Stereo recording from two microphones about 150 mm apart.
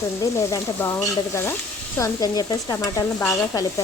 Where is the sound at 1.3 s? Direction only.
15° left (ahead or behind).